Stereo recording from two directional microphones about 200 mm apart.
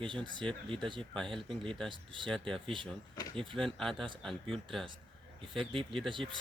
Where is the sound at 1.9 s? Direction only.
25° right (ahead or behind).